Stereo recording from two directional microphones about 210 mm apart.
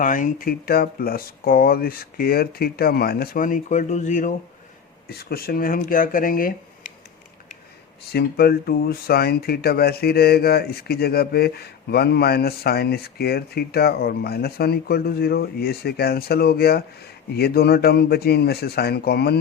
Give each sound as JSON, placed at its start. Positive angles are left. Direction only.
{"t": 0.0, "sound": "speech", "side_deg": 40}
{"t": 8.1, "sound": "speech", "side_deg": 50}